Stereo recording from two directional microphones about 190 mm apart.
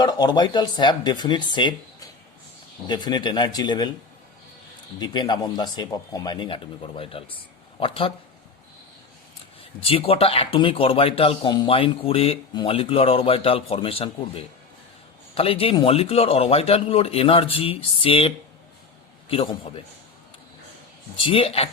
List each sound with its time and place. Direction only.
0.0 s speech: 20° left (ahead or behind)
4.9 s speech: 20° left (ahead or behind)
9.6 s speech: 30° left (ahead or behind)
21.2 s speech: 30° left (ahead or behind)